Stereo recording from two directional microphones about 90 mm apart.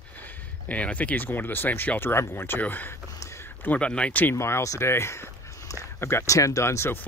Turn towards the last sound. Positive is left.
turn(degrees=30)  # may be behind; listen again after turning